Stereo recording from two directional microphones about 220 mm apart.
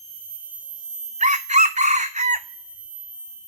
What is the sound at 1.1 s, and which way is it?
Chicken, 30° right (ahead or behind).